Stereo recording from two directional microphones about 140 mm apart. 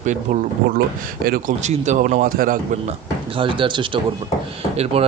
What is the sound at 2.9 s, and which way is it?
Speech, 40° right (ahead or behind).